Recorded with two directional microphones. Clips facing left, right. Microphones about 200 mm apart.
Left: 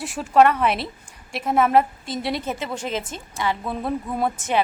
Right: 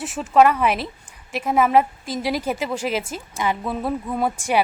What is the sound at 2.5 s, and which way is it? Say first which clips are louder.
A woman's voice: right 3 dB; 10° right (ahead or behind).